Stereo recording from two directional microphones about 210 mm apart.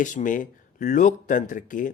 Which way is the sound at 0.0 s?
35° left (ahead or behind).